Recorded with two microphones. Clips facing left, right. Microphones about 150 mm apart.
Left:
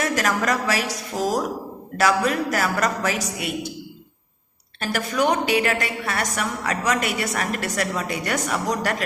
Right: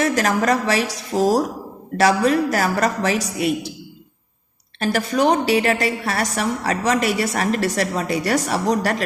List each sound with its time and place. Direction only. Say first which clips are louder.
0.0 s a woman's voice: right 4 dB; 30° right (ahead or behind)
4.8 s a woman's voice: right 4 dB; 35° right (ahead or behind)